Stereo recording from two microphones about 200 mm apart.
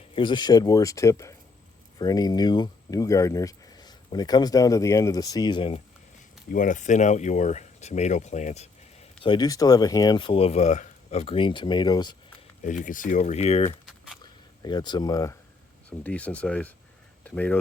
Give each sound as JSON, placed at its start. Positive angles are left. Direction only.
{"t": 0.2, "sound": "speech", "side_deg": 20}
{"t": 6.5, "sound": "speech", "side_deg": 40}
{"t": 12.6, "sound": "speech", "side_deg": 40}
{"t": 13.8, "sound": "a sound", "side_deg": -5}
{"t": 14.6, "sound": "speech", "side_deg": 20}